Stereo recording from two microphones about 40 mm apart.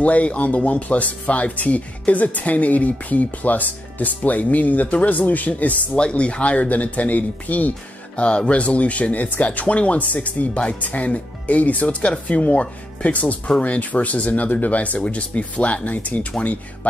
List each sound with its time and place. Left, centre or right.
0.0 s speech: left
5.9 s speech: left
8.2 s speech: left